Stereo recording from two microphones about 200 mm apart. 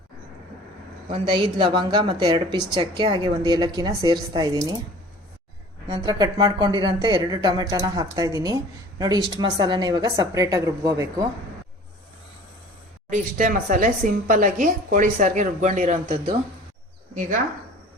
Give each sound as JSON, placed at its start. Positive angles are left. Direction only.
{"t": 1.1, "sound": "speech", "side_deg": -25}
{"t": 5.9, "sound": "speech", "side_deg": -20}
{"t": 13.1, "sound": "a woman's voice", "side_deg": -40}